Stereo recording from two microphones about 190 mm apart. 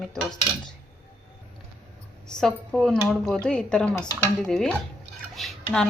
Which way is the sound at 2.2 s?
5° left (ahead or behind).